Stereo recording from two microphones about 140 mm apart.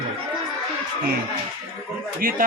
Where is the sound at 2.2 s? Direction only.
85° right.